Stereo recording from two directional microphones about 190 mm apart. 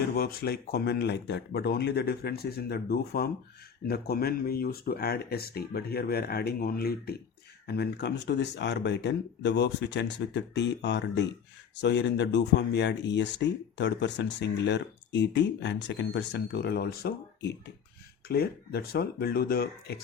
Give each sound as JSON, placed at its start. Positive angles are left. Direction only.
{"t": 0.2, "sound": "speech", "side_deg": 55}